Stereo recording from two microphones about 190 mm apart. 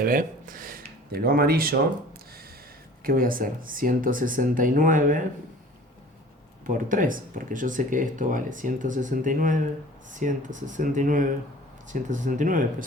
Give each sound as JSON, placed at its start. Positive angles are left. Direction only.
{"t": 0.0, "sound": "speech", "side_deg": -45}
{"t": 3.0, "sound": "speech", "side_deg": -50}
{"t": 6.7, "sound": "speech", "side_deg": -45}